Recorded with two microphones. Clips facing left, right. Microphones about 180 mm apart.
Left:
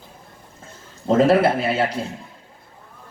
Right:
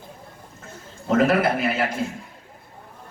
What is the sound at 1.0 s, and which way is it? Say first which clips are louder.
Speech: left 4 dB; 30° left (ahead or behind).